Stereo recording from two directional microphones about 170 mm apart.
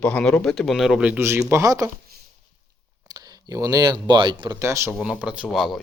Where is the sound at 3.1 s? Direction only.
20° right (ahead or behind).